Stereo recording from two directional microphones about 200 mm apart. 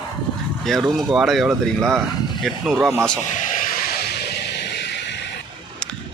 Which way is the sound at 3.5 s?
45° left (ahead or behind).